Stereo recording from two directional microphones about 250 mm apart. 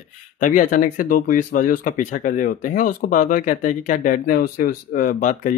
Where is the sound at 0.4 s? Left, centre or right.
Left.